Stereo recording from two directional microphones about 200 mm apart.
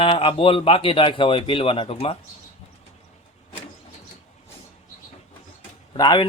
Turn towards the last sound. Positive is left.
turn(degrees=20)  # may be behind; listen again after turning